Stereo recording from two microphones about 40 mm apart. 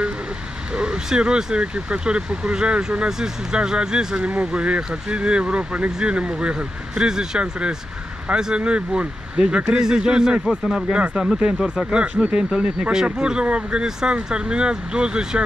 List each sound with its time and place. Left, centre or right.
0.7 s speech: right